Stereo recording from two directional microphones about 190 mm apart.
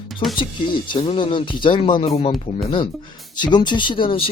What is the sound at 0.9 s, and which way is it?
Speech, 30° left (ahead or behind).